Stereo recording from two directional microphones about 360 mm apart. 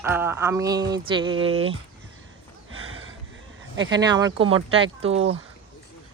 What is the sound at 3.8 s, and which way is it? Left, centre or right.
Speech, centre.